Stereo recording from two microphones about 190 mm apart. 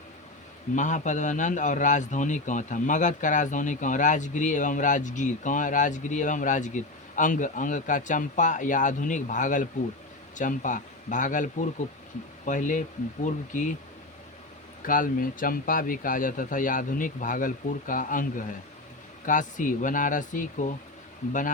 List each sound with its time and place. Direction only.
0.8 s a man's voice: 40° left (ahead or behind)
14.8 s speech: 45° left (ahead or behind)